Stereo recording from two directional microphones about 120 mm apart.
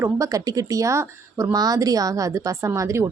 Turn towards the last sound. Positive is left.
turn(degrees=-25)  # may be behind; listen again after turning